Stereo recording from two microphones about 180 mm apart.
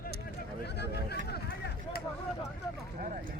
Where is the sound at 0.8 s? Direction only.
65° left (ahead or behind).